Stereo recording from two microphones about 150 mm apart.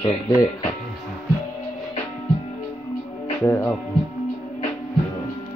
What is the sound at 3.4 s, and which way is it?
Speech, 15° left (ahead or behind).